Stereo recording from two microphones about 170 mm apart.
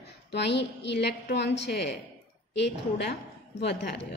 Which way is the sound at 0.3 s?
80° left.